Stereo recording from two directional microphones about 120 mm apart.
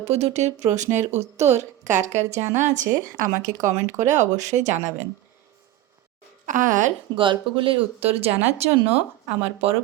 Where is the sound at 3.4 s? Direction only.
80° right.